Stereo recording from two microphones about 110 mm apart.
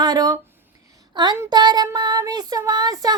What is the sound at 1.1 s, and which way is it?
Child singing, 40° right (ahead or behind).